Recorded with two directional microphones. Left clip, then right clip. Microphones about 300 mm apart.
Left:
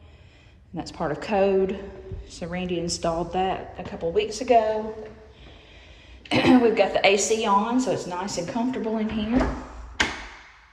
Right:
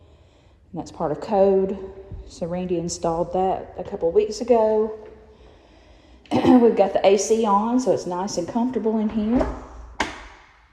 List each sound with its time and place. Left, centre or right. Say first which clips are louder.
0.8 s speech: right 2 dB; centre
6.2 s speech: right 2 dB; centre